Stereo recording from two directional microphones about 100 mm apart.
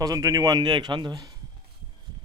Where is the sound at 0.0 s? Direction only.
35° right (ahead or behind).